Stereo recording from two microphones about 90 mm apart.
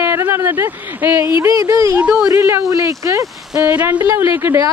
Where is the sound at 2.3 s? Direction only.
35° right (ahead or behind).